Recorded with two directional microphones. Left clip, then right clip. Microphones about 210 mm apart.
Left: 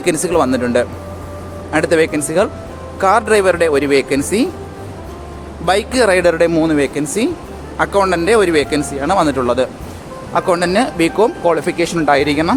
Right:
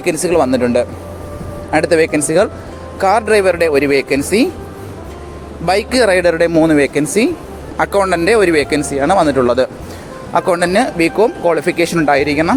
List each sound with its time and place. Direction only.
0.0 s speech: 10° right (ahead or behind)
5.6 s speech: 15° right (ahead or behind)